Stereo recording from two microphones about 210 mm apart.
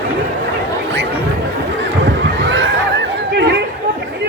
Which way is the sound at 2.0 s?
60° right (ahead or behind).